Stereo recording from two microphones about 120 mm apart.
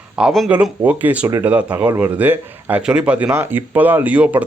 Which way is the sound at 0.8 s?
15° right (ahead or behind).